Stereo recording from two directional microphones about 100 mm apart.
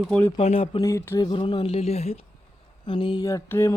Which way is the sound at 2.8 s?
55° left (ahead or behind).